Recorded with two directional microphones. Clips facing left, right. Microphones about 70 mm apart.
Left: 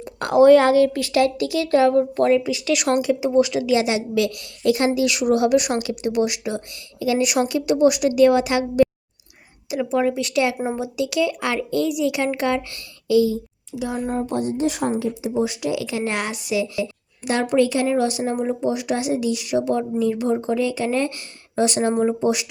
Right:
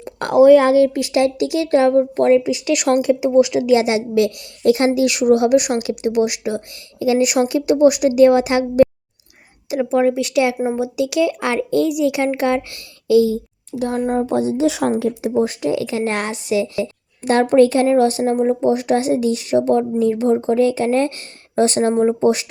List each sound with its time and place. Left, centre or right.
0.0 s a sound: right
0.4 s speech: centre; by 2.5 s right
2.5 s speech: right
13.7 s speech: right
14.2 s speech: right
15.3 s a woman's voice: right